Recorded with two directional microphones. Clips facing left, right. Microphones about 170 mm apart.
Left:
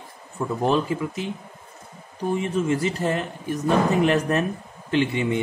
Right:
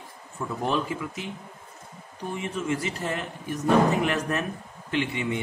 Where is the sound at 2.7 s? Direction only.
35° left (ahead or behind).